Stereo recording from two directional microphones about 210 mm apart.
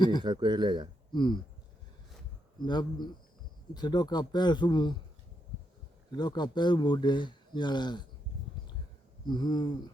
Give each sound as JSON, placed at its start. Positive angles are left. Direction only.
{"t": 0.2, "sound": "speech", "side_deg": -20}
{"t": 1.1, "sound": "speech", "side_deg": 20}
{"t": 2.6, "sound": "speech", "side_deg": 20}
{"t": 6.1, "sound": "speech", "side_deg": 20}
{"t": 9.2, "sound": "speech", "side_deg": 20}